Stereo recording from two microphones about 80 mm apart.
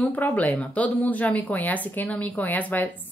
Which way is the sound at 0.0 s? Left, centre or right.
Centre.